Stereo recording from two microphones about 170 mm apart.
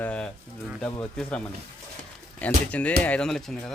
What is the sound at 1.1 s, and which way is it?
Speech, 5° left (ahead or behind).